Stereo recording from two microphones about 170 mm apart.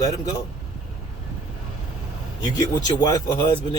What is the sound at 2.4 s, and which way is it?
Speech, 25° left (ahead or behind).